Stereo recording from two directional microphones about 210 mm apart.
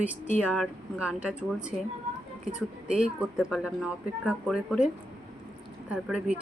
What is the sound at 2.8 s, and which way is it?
Speech, 5° right (ahead or behind).